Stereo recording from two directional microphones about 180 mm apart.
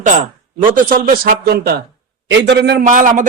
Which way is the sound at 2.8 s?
45° right (ahead or behind).